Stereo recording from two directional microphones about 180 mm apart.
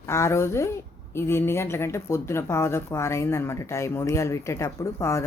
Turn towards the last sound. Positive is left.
turn(degrees=15)  # may be behind; listen again after turning